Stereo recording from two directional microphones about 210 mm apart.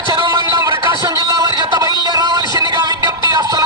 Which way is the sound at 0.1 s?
20° right (ahead or behind).